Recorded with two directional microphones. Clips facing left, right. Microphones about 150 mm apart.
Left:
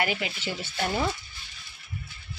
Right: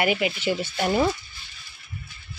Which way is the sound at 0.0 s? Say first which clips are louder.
Right 6 dB; 15° right (ahead or behind).